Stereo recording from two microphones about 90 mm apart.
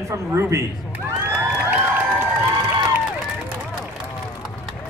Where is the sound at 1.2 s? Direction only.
25° right (ahead or behind).